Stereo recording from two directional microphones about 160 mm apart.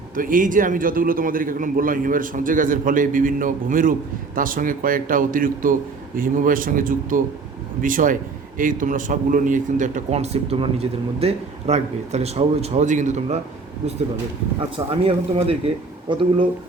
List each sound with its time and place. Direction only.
0.2 s a man's voice: 60° right (ahead or behind)
14.8 s speech: 35° right (ahead or behind)